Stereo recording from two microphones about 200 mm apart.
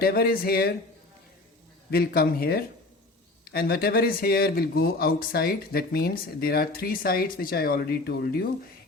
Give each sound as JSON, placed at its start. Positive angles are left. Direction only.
{"t": 0.0, "sound": "speech", "side_deg": 50}
{"t": 1.9, "sound": "speech", "side_deg": 50}